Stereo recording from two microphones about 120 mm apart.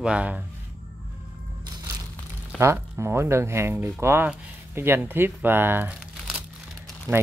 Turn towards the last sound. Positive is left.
turn(degrees=-30)  # may be behind; listen again after turning